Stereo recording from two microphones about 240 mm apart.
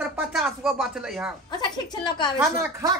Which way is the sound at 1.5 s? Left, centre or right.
Centre.